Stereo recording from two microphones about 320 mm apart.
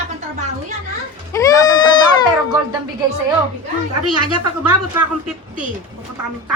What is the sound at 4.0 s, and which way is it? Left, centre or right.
Speech, right.